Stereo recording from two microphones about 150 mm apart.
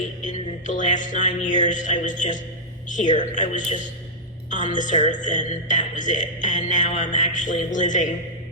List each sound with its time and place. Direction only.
0.3 s music: 55° left (ahead or behind)